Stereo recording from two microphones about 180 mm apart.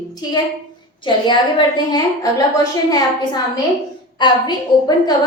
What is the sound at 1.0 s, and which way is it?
A woman's voice, 25° left (ahead or behind).